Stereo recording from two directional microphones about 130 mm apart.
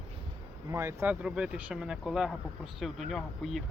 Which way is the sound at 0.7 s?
20° right (ahead or behind).